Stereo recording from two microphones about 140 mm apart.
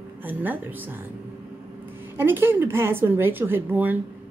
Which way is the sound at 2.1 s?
15° right (ahead or behind).